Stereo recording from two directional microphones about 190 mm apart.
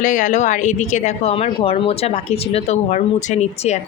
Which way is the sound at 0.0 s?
40° left (ahead or behind).